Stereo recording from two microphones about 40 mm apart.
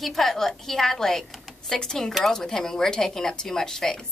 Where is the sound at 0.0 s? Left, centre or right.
Centre.